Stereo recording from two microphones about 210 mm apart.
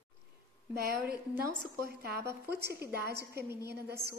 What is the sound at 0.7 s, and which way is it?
A woman's voice, 50° right (ahead or behind).